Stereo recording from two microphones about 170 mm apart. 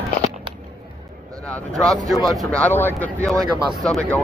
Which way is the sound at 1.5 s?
5° left (ahead or behind).